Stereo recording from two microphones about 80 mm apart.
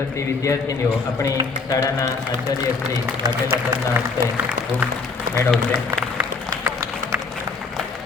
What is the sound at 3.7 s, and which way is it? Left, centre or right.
Speech, centre.